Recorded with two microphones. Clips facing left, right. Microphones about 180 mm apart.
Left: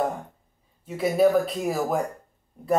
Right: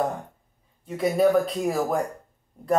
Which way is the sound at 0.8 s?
Centre (ahead or behind).